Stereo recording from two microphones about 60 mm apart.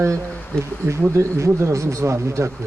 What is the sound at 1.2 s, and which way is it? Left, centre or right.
Speech, right.